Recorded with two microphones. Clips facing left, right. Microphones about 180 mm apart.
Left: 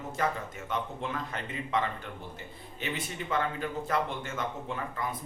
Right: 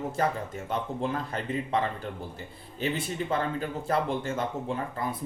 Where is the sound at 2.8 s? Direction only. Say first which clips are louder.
Right 6 dB; 35° right (ahead or behind).